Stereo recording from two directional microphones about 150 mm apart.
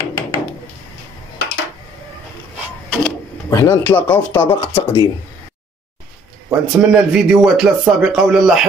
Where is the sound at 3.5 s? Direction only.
15° left (ahead or behind).